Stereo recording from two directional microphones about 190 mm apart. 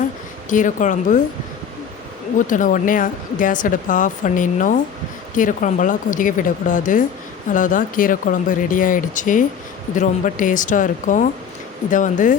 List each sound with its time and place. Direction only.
0.5 s speech: 40° left (ahead or behind)
2.5 s speech: 45° left (ahead or behind)